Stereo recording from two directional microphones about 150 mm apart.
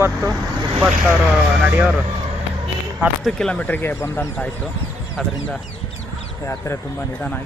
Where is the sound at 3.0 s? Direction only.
Centre (ahead or behind).